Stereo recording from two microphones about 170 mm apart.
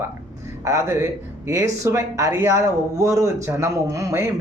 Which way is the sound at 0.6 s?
15° right (ahead or behind).